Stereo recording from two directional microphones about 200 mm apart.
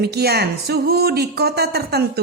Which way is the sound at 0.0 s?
55° right (ahead or behind).